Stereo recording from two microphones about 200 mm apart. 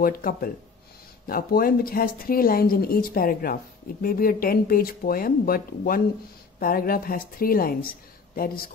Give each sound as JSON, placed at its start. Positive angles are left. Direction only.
{"t": 0.0, "sound": "a woman's voice", "side_deg": 45}